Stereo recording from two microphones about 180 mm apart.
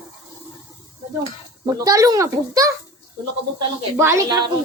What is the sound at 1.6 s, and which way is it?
A woman's voice, 20° right (ahead or behind).